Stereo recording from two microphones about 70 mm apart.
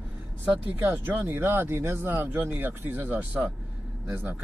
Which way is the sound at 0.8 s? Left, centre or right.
Right.